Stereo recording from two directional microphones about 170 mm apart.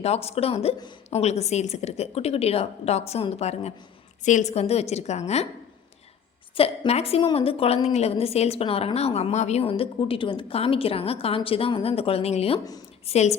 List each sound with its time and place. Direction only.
0.0 s a woman's voice: 35° left (ahead or behind)
6.5 s a woman's voice: 35° left (ahead or behind)